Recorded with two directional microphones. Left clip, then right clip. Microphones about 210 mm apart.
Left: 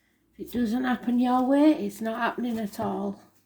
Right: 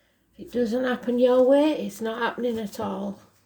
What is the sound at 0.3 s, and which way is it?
A woman's voice, 25° right (ahead or behind).